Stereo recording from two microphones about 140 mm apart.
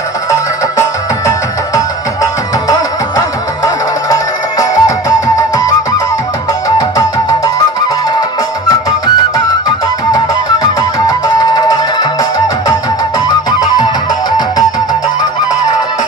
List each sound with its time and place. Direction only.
0.3 s music: 20° left (ahead or behind)
3.2 s music: 25° left (ahead or behind)
10.1 s music: 25° left (ahead or behind)